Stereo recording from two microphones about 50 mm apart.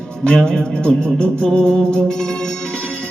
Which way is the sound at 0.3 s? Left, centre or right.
Centre.